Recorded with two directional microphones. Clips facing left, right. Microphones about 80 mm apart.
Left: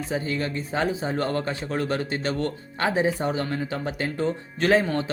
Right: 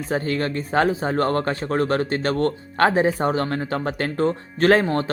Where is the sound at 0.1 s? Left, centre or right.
Right.